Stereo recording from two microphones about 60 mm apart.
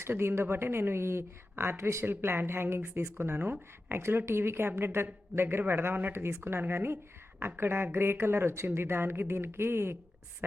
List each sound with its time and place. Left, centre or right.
0.0 s a woman's voice: right
2.0 s a woman's voice: right